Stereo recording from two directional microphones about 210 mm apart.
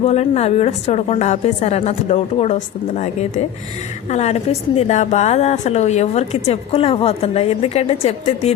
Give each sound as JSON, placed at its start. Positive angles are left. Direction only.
{"t": 0.0, "sound": "a woman's voice", "side_deg": 30}